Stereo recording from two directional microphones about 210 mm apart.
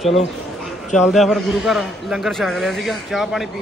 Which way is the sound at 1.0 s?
Centre (ahead or behind).